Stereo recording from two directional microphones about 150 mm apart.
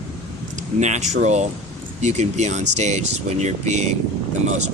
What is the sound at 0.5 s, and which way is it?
Speech, 50° right (ahead or behind).